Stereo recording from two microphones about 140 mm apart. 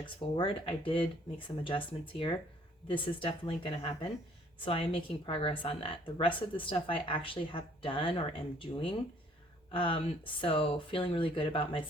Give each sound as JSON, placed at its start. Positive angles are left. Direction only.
{"t": 0.0, "sound": "a woman's voice", "side_deg": 40}